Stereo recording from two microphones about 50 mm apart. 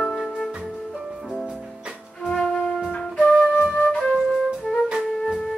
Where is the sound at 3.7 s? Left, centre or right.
Left.